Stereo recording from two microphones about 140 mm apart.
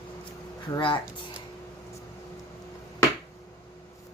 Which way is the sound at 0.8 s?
40° left (ahead or behind).